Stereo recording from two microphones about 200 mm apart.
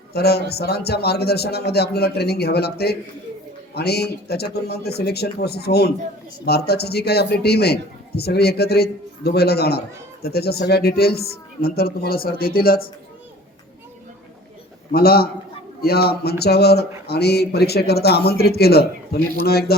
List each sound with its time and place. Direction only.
0.1 s a man's voice: 55° left (ahead or behind)
14.9 s a man's voice: 50° left (ahead or behind)